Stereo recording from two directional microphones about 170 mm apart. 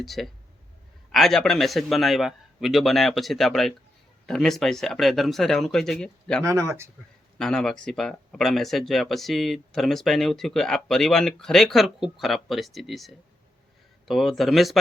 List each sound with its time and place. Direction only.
0.0 s speech: centre (ahead or behind)
6.4 s speech: 15° right (ahead or behind)
7.3 s speech: 5° left (ahead or behind)